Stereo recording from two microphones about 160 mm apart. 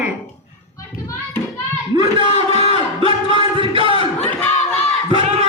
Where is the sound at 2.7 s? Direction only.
35° right (ahead or behind).